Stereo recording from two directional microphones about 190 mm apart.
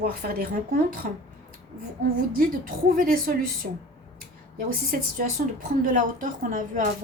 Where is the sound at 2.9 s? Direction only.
50° right (ahead or behind).